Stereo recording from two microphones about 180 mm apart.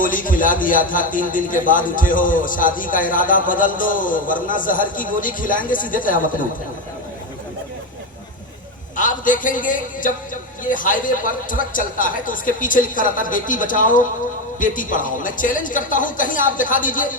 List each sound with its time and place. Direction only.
0.0 s a man's voice: 50° left (ahead or behind)
9.0 s a man's voice: 45° left (ahead or behind)